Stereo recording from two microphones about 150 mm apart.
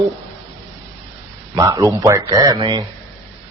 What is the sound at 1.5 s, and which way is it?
A man's voice, 20° right (ahead or behind).